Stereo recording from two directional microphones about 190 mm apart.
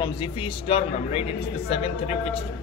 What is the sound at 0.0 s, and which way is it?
A man's voice, 25° left (ahead or behind).